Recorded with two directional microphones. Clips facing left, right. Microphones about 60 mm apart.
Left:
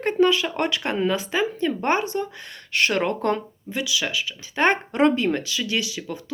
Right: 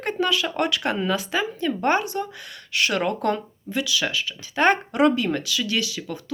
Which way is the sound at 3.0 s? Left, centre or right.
Left.